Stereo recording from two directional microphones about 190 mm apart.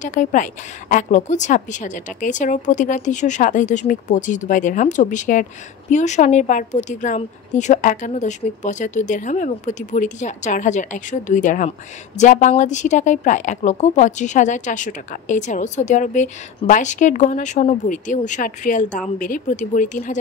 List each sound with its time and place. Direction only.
0.0 s a woman's voice: 40° left (ahead or behind)